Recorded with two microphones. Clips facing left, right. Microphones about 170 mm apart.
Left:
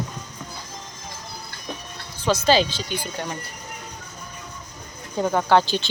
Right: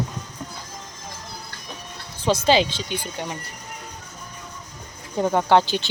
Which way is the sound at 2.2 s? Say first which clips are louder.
Even; 25° right (ahead or behind).